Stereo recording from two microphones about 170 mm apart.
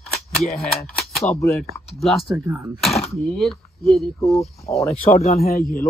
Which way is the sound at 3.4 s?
Centre (ahead or behind).